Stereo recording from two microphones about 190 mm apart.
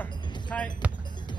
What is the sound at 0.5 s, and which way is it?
Basketball bounce, 10° left (ahead or behind).